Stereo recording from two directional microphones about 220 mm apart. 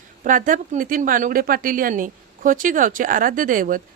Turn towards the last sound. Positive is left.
turn(degrees=-40)  # may be behind; listen again after turning